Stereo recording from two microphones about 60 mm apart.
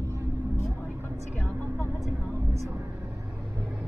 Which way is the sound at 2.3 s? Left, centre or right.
Right.